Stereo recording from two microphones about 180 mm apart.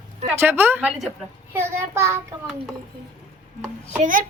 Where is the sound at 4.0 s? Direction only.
45° right (ahead or behind).